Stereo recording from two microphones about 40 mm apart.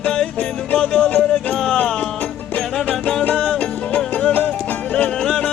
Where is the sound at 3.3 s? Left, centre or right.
Left.